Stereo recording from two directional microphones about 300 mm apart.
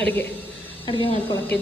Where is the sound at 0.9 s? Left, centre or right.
Centre.